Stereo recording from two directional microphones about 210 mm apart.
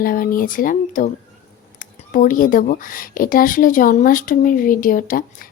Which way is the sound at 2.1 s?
40° left (ahead or behind).